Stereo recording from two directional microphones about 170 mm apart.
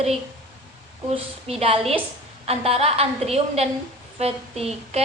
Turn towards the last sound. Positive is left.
turn(degrees=-40)  # may be behind; listen again after turning